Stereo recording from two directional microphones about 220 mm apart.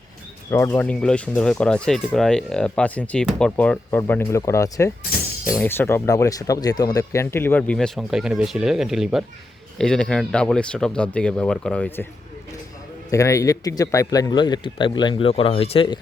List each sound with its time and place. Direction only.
0.5 s speech: 10° left (ahead or behind)
13.1 s speech: 15° left (ahead or behind)